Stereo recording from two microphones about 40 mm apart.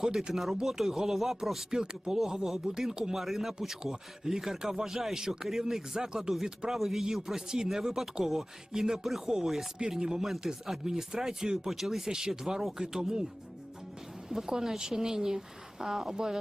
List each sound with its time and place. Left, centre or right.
0.0 s speech: centre
1.7 s speech: centre
14.3 s speech: centre